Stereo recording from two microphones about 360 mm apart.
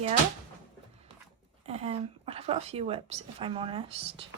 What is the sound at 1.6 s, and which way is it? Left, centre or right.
Speech, centre.